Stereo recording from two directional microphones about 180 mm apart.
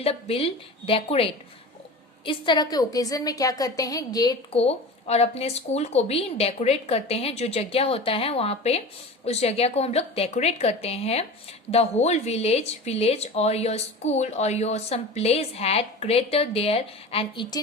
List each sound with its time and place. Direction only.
0.0 s a woman's voice: 35° left (ahead or behind)
4.5 s speech: 35° left (ahead or behind)